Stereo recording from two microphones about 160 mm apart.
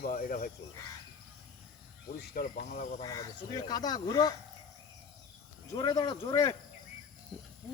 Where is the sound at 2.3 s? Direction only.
60° left (ahead or behind).